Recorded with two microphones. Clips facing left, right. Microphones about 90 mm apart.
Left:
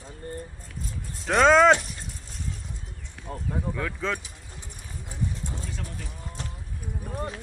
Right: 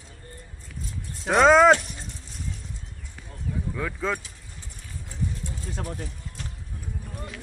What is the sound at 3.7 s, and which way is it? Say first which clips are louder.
Speech: right 4 dB; 5° right (ahead or behind).